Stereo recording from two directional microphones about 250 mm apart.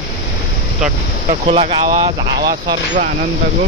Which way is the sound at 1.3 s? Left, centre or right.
Right.